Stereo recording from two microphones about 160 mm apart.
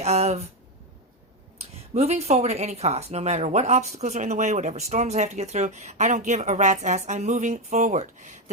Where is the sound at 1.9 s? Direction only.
40° right (ahead or behind).